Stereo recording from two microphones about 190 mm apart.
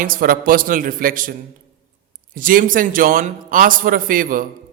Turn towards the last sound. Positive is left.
turn(degrees=-45)  # may be behind; listen again after turning